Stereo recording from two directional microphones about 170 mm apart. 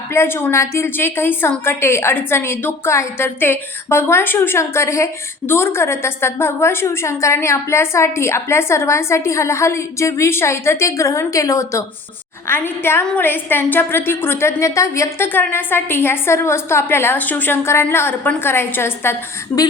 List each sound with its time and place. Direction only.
0.1 s a woman's voice: 15° left (ahead or behind)